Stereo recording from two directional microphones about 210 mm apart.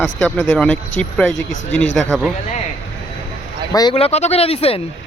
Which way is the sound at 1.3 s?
35° left (ahead or behind).